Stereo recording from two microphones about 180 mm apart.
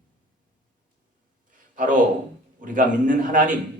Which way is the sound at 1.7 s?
50° right (ahead or behind).